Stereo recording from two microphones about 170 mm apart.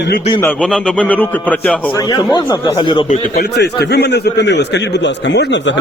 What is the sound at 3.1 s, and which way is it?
A man's voice, 60° left (ahead or behind).